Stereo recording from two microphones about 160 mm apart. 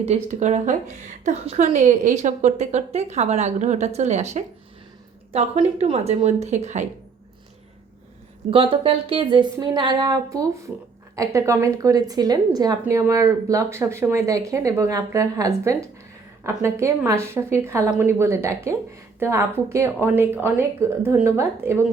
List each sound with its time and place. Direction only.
0.0 s a woman's voice: 45° right (ahead or behind)
5.5 s a woman's voice: 35° right (ahead or behind)
8.4 s speech: 35° right (ahead or behind); by 21.8 s 15° right (ahead or behind)